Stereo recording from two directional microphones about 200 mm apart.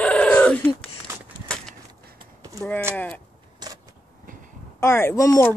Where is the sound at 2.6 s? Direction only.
10° left (ahead or behind).